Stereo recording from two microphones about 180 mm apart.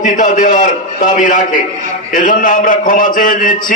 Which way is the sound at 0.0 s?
45° left (ahead or behind).